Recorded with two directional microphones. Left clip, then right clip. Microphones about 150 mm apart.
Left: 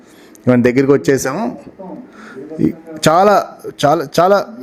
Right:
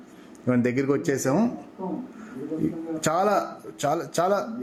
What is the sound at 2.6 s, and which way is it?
A man's voice, 35° left (ahead or behind).